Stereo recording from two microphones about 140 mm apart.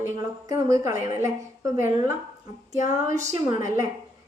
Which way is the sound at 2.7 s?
65° left (ahead or behind).